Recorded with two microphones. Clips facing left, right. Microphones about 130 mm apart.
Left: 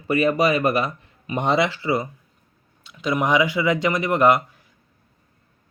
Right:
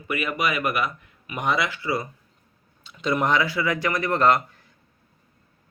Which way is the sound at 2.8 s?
5° left (ahead or behind).